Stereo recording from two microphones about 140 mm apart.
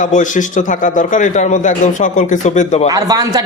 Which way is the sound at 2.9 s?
25° right (ahead or behind).